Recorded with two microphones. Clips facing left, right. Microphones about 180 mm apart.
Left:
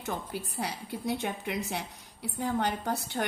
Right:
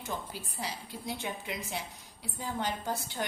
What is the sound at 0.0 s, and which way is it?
A woman's voice, 60° left (ahead or behind).